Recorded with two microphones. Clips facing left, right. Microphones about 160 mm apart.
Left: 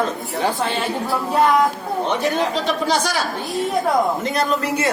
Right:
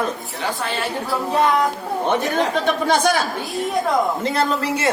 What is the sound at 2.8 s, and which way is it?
Speech, 55° right (ahead or behind).